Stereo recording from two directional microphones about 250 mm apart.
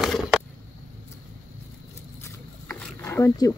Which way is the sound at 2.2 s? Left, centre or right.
Centre.